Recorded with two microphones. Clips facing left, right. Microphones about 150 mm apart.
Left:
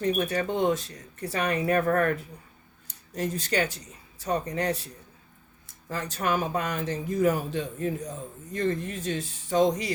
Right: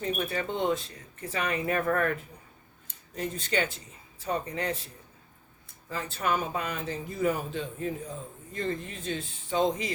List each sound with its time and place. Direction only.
0.2 s speech: 40° left (ahead or behind)
3.2 s speech: 40° left (ahead or behind)
5.9 s speech: 40° left (ahead or behind)